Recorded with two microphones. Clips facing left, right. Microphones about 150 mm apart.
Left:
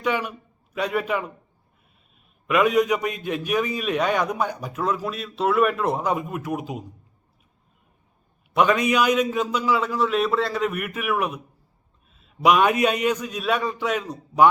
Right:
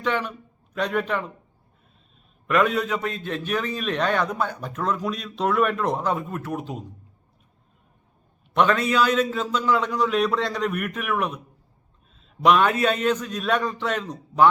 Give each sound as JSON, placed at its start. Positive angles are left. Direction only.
{"t": 0.0, "sound": "a man's voice", "side_deg": 10}
{"t": 2.5, "sound": "a man's voice", "side_deg": 10}
{"t": 8.5, "sound": "a man's voice", "side_deg": 10}